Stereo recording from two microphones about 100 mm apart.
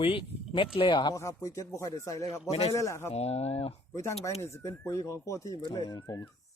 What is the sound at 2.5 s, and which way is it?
Speech, 80° left.